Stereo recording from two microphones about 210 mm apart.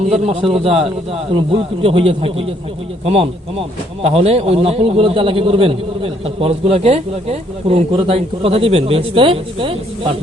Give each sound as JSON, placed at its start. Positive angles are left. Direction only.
{"t": 0.3, "sound": "a man's voice", "side_deg": -30}